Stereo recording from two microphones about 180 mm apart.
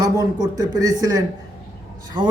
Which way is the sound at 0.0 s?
25° right (ahead or behind).